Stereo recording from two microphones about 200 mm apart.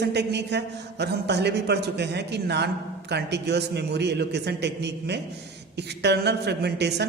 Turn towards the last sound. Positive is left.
turn(degrees=-55)  # may be behind; listen again after turning